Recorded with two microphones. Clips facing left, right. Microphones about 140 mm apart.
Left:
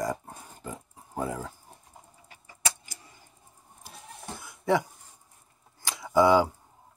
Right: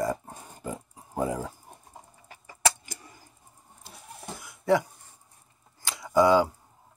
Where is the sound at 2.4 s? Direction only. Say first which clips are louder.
Right 7 dB; 70° right (ahead or behind).